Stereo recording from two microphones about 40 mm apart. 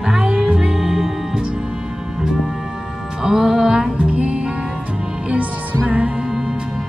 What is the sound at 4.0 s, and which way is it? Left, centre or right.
Music, right.